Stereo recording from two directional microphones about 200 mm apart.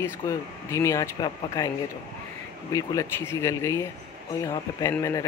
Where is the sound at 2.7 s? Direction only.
15° left (ahead or behind).